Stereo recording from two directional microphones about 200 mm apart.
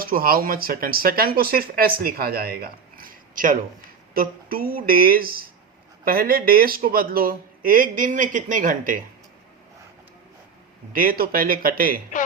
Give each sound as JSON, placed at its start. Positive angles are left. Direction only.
{"t": 0.0, "sound": "speech", "side_deg": -45}
{"t": 10.9, "sound": "speech", "side_deg": -45}